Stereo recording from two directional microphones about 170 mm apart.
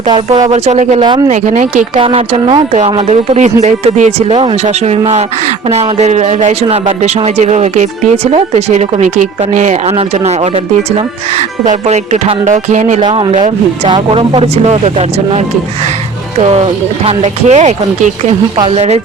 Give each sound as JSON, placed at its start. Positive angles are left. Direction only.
{"t": 0.1, "sound": "speech", "side_deg": -25}
{"t": 0.5, "sound": "speech", "side_deg": -40}
{"t": 1.3, "sound": "music", "side_deg": -45}
{"t": 2.0, "sound": "speech", "side_deg": -30}
{"t": 3.1, "sound": "music", "side_deg": -40}
{"t": 3.6, "sound": "speech", "side_deg": -45}
{"t": 11.6, "sound": "music", "side_deg": -45}
{"t": 13.0, "sound": "speech", "side_deg": -30}